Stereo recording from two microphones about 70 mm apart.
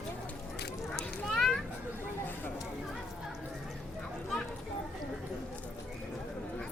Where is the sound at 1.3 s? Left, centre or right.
Centre.